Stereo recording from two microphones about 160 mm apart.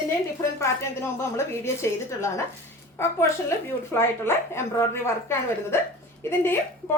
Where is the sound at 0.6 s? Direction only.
15° left (ahead or behind).